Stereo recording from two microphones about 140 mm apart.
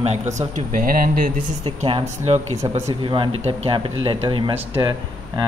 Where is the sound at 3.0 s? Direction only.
35° right (ahead or behind).